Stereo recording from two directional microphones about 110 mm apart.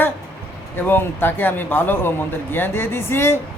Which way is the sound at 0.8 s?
20° left (ahead or behind).